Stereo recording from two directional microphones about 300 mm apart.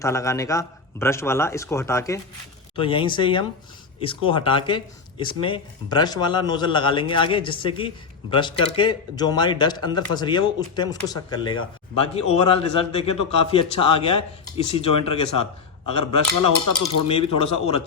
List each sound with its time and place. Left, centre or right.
0.0 s speech: centre
16.8 s speech: centre